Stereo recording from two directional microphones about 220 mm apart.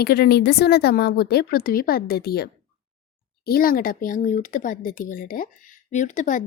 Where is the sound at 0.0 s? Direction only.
45° left (ahead or behind).